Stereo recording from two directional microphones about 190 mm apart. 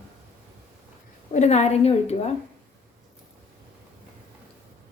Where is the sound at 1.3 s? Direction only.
35° left (ahead or behind).